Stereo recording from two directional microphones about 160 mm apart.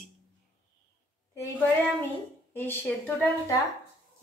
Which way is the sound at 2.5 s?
15° left (ahead or behind).